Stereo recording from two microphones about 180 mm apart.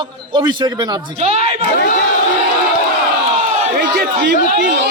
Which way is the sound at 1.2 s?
35° right (ahead or behind).